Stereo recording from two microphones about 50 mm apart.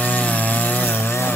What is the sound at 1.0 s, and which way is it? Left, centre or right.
Chainsaw, left.